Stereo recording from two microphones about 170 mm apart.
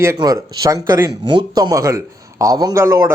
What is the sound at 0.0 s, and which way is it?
Speech, 20° right (ahead or behind).